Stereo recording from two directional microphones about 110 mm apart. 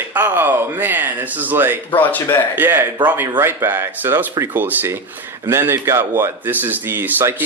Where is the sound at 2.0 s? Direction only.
15° left (ahead or behind).